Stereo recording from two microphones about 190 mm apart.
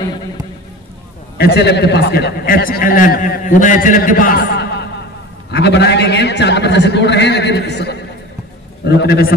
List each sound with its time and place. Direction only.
1.4 s a man's voice: 60° left (ahead or behind)